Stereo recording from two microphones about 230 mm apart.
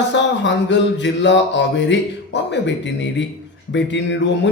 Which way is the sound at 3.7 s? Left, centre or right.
Left.